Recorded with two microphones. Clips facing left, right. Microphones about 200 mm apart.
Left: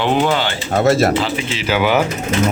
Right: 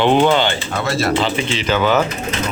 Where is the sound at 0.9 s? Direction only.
45° left (ahead or behind).